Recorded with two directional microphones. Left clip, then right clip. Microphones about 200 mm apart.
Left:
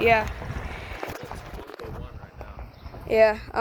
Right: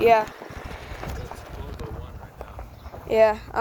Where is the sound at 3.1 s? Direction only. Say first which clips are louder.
Right 1 dB; centre (ahead or behind).